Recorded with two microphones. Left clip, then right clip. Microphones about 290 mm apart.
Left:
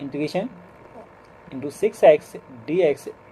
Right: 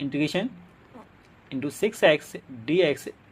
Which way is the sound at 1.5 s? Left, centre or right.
Right.